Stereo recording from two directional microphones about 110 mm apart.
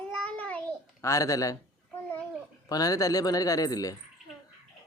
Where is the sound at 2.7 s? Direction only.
30° left (ahead or behind).